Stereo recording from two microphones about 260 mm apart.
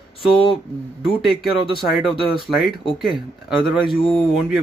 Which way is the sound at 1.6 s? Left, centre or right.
Centre.